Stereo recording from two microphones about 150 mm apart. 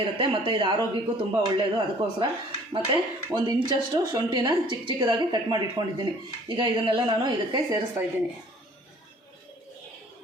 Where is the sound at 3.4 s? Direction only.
30° right (ahead or behind).